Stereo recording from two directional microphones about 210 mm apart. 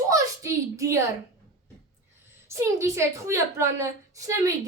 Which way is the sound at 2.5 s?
15° right (ahead or behind).